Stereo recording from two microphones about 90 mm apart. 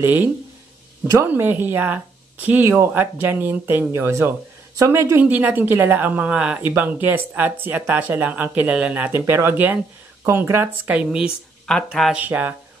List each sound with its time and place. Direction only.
0.0 s a woman's voice: 20° right (ahead or behind)
5.2 s speech: 15° right (ahead or behind)
9.3 s speech: 25° right (ahead or behind)
10.9 s speech: 10° right (ahead or behind)
11.6 s speech: 5° left (ahead or behind)
12.1 s speech: 15° right (ahead or behind)